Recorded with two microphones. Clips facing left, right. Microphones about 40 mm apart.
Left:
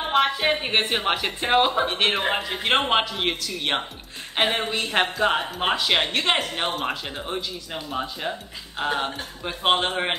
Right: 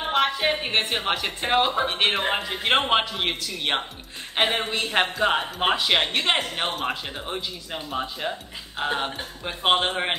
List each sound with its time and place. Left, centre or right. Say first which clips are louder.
0.0 s a woman's voice: left 1 dB; centre